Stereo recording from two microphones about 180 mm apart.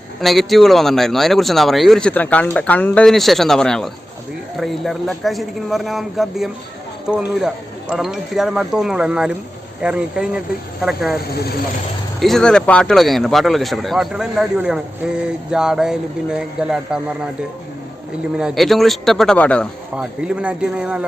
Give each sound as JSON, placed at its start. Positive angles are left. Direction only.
{"t": 0.2, "sound": "speech", "side_deg": 0}
{"t": 11.3, "sound": "speech", "side_deg": 60}
{"t": 12.2, "sound": "speech", "side_deg": 0}
{"t": 18.3, "sound": "speech", "side_deg": 0}
{"t": 20.0, "sound": "speech", "side_deg": -5}